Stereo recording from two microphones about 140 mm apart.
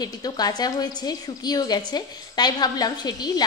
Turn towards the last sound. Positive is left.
turn(degrees=30)  # may be behind; listen again after turning